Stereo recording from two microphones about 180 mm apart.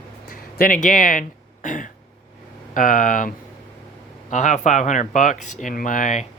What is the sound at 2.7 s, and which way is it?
Speech, 45° left (ahead or behind).